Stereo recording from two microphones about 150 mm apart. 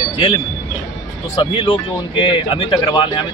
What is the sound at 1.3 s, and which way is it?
Speech, 35° left (ahead or behind).